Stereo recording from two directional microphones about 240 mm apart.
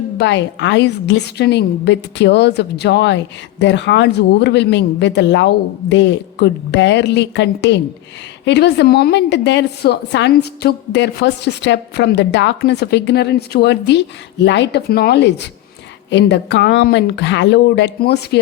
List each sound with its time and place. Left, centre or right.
0.2 s a woman's voice: left